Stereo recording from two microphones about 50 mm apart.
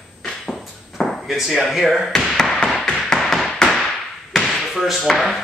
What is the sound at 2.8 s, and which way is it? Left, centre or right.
Tap, centre.